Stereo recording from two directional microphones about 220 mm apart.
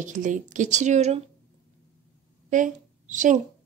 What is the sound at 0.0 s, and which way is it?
A woman's voice, 35° right (ahead or behind).